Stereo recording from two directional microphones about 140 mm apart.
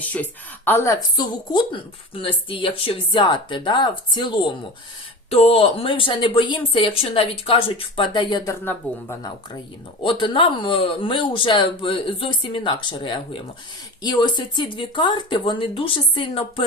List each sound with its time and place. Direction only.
0.0 s speech: 10° left (ahead or behind); by 8.5 s 30° left (ahead or behind)
8.6 s speech: 20° left (ahead or behind)
10.0 s speech: 35° left (ahead or behind)